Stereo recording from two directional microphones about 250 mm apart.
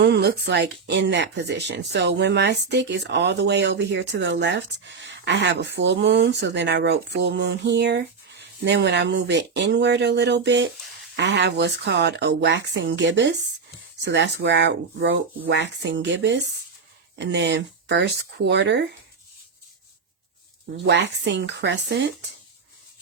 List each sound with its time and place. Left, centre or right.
0.0 s speech: right
20.7 s speech: right